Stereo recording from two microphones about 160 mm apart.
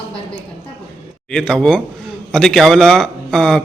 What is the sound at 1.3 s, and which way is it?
A man's voice, 5° left (ahead or behind).